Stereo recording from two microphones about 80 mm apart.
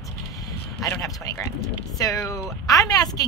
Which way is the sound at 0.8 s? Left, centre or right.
Left.